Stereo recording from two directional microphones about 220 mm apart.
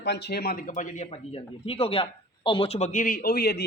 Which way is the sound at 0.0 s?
50° left (ahead or behind).